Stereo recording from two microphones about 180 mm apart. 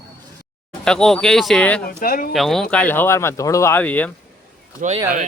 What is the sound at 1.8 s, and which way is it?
Speech, 55° left (ahead or behind).